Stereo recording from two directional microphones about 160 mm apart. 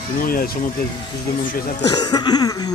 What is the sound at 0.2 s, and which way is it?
Speech, 65° left (ahead or behind).